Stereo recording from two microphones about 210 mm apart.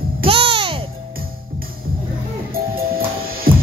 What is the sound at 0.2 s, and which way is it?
Music, 25° right (ahead or behind).